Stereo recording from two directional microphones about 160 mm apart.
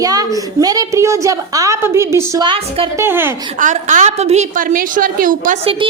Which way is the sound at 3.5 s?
50° right (ahead or behind).